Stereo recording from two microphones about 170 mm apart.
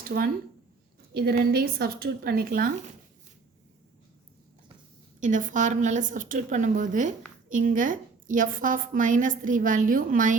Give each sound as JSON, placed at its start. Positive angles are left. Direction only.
{"t": 0.0, "sound": "a woman's voice", "side_deg": -55}
{"t": 5.2, "sound": "a woman's voice", "side_deg": -50}